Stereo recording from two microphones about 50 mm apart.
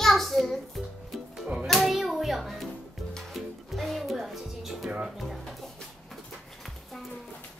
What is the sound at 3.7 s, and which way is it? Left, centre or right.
Music, centre.